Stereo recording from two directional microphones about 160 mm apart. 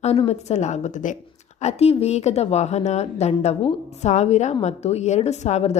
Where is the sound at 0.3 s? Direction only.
45° left (ahead or behind).